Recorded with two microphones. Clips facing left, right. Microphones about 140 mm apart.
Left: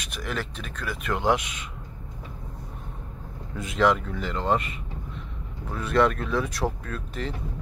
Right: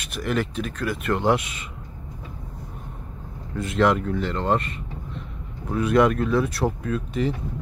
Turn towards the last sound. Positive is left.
turn(degrees=-10)  # may be behind; listen again after turning